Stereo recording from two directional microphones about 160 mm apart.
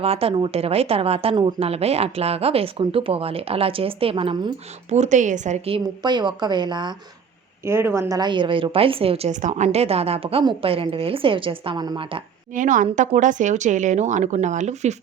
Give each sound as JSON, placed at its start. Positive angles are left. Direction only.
{"t": 0.0, "sound": "speech", "side_deg": -40}
{"t": 6.0, "sound": "speech", "side_deg": -30}
{"t": 7.6, "sound": "speech", "side_deg": -15}
{"t": 12.5, "sound": "speech", "side_deg": -55}